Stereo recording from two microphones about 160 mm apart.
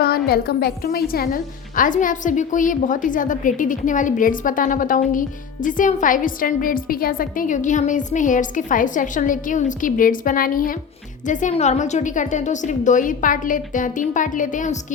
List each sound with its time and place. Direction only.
0.3 s a woman's voice: 75° left (ahead or behind)
11.3 s a woman's voice: 50° left (ahead or behind)